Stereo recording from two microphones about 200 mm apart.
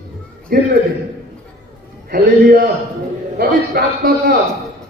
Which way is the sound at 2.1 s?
45° right (ahead or behind).